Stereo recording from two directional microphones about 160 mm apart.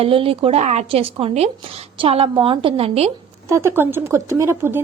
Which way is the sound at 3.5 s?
15° right (ahead or behind).